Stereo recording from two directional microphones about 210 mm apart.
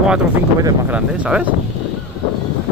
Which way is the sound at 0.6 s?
5° right (ahead or behind).